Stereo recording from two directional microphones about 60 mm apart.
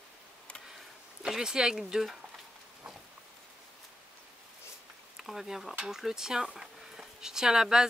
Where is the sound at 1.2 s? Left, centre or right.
Centre.